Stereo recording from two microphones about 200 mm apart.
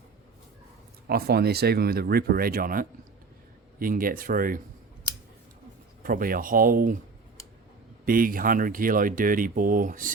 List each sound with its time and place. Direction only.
1.0 s speech: 50° right (ahead or behind)
6.0 s speech: 45° right (ahead or behind)
8.0 s speech: 45° right (ahead or behind)